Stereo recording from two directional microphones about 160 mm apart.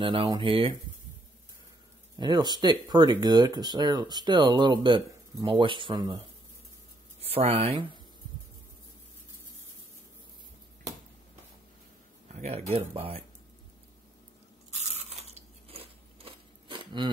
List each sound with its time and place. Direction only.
0.0 s speech: 35° right (ahead or behind)
2.1 s speech: 25° right (ahead or behind)
7.2 s speech: 40° right (ahead or behind)
12.4 s speech: 40° right (ahead or behind)
14.7 s crunch: 45° right (ahead or behind)
15.7 s a sound: 35° right (ahead or behind)